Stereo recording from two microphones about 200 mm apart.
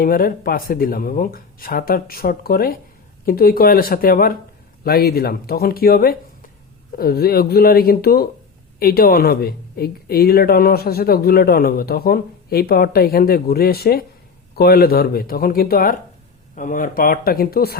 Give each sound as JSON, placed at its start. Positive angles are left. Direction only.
{"t": 0.0, "sound": "a woman's voice", "side_deg": 45}